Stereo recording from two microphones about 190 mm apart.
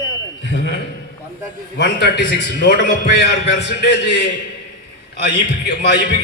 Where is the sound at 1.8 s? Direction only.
60° left (ahead or behind).